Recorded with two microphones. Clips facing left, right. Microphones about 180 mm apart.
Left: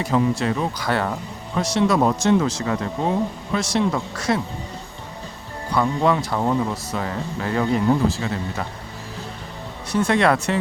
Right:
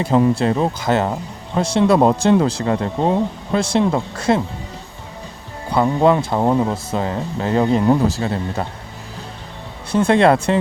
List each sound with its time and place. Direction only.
0.3 s speech: 30° right (ahead or behind)
5.7 s speech: 30° right (ahead or behind)
7.9 s speech: 40° right (ahead or behind)
9.9 s speech: 30° right (ahead or behind)